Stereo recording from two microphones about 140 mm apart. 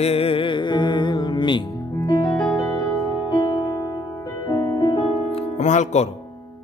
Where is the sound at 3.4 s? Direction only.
30° left (ahead or behind); by 6.1 s 55° left (ahead or behind).